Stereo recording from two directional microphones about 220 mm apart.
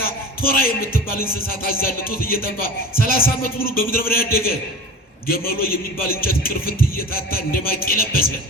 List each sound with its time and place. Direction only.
0.4 s a man's voice: 40° left (ahead or behind)